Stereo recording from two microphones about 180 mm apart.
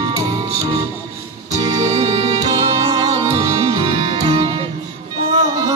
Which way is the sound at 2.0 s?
25° right (ahead or behind).